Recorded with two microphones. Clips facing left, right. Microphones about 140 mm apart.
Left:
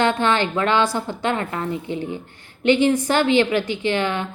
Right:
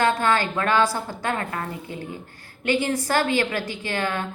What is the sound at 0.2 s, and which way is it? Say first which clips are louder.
A woman's voice: left 3 dB; 25° left (ahead or behind).